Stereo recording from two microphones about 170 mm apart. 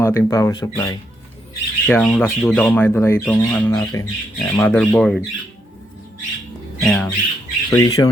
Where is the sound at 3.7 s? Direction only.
20° left (ahead or behind).